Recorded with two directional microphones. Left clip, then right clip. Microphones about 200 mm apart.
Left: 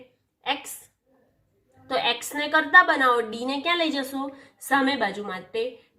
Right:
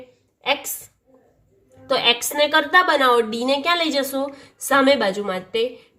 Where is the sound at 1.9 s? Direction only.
20° right (ahead or behind).